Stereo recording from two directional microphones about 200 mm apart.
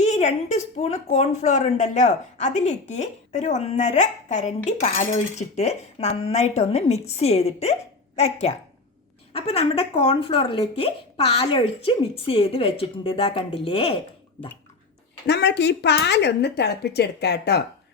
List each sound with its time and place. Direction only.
0.0 s a woman's voice: 35° left (ahead or behind)
15.3 s speech: 60° left (ahead or behind)